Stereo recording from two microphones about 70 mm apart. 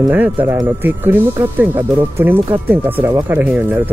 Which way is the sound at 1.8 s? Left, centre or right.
Right.